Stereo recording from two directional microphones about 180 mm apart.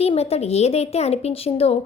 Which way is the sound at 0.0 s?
35° left (ahead or behind).